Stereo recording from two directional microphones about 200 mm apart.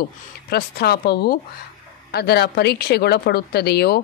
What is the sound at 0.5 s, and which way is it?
A woman's voice, 50° left (ahead or behind).